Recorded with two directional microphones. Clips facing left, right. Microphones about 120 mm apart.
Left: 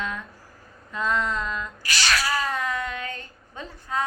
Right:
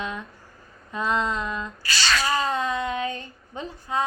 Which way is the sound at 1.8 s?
15° left (ahead or behind).